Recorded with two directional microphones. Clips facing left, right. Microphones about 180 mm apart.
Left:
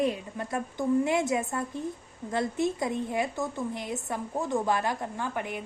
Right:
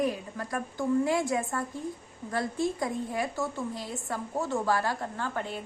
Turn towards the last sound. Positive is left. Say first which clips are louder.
# left 1 dB
turn(degrees=15)  # may be behind; listen again after turning